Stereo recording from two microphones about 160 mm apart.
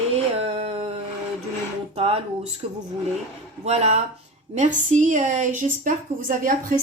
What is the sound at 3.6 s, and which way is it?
A woman's voice, 45° right (ahead or behind).